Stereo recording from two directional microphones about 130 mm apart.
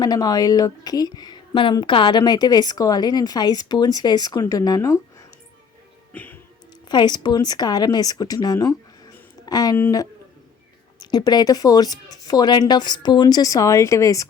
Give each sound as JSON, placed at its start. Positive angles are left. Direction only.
{"t": 0.0, "sound": "speech", "side_deg": 30}
{"t": 6.1, "sound": "music", "side_deg": 15}
{"t": 6.8, "sound": "speech", "side_deg": 35}